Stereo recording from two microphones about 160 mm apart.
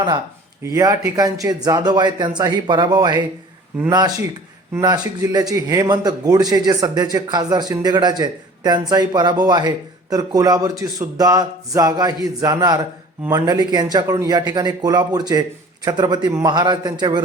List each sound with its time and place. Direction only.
0.6 s a man's voice: 20° right (ahead or behind)